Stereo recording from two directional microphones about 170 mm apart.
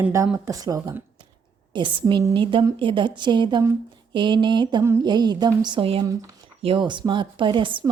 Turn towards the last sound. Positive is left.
turn(degrees=-30)  # may be behind; listen again after turning